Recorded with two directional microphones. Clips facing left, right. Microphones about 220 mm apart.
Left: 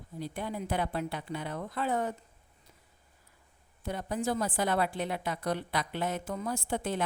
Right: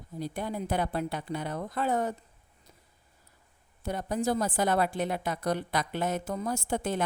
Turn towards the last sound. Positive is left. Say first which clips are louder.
# right 2 dB
turn(degrees=-45)  # may be behind; listen again after turning